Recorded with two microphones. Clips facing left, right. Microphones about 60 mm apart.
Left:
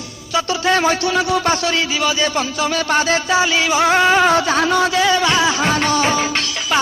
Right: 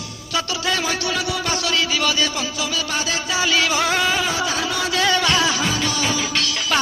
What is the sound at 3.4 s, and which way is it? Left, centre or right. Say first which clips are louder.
Music: left 4 dB; left.